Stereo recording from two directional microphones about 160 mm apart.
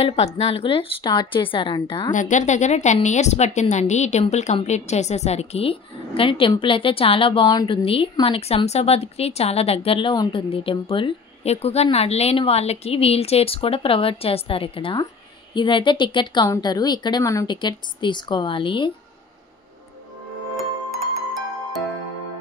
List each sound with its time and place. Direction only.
0.0 s a woman's voice: 40° left (ahead or behind)
2.1 s a woman's voice: 50° left (ahead or behind); by 18.9 s 30° left (ahead or behind)